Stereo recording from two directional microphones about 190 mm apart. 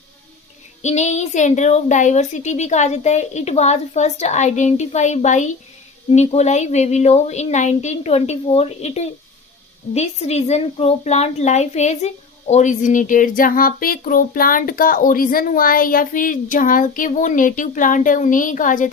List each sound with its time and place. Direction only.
0.8 s a woman's voice: 40° left (ahead or behind)